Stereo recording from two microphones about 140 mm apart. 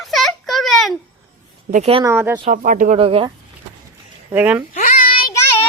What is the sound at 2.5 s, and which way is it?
Speech, 70° right (ahead or behind).